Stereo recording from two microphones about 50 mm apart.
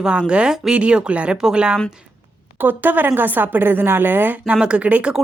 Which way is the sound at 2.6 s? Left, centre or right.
Right.